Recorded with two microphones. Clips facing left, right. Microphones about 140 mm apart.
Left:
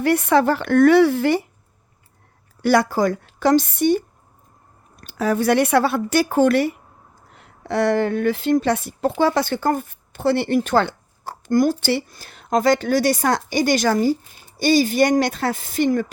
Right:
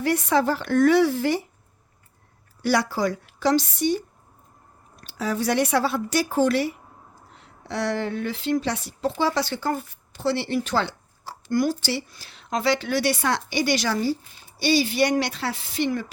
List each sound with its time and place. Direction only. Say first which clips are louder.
0.0 s speech: left 5 dB; 60° left (ahead or behind)
2.6 s speech: left 5 dB; 55° left (ahead or behind)